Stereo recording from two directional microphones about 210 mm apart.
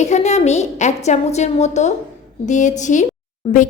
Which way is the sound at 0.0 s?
35° left (ahead or behind).